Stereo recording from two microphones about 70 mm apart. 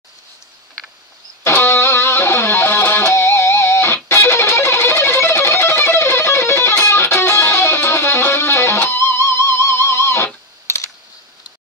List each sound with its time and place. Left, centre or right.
1.4 s music: left